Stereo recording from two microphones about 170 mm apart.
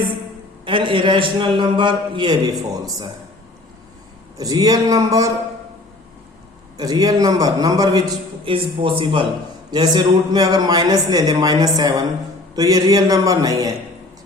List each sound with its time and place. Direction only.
0.6 s a man's voice: 30° right (ahead or behind)
4.4 s a man's voice: 20° right (ahead or behind)
6.7 s a man's voice: 25° right (ahead or behind)